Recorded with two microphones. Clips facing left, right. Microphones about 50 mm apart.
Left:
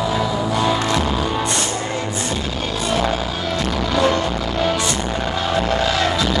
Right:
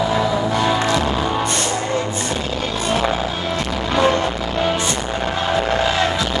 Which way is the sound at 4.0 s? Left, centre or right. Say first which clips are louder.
Right 2 dB; right.